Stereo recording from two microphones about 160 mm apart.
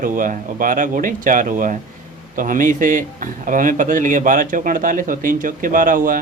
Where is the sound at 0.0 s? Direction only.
55° right (ahead or behind).